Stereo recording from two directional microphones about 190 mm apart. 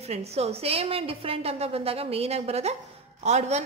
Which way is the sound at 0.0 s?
35° right (ahead or behind).